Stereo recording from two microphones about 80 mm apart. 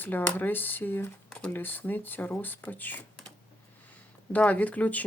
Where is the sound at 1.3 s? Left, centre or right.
Centre.